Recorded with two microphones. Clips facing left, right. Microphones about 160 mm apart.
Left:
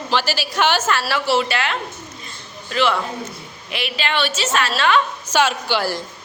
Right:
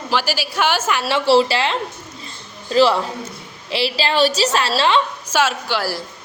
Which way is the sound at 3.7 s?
30° right (ahead or behind).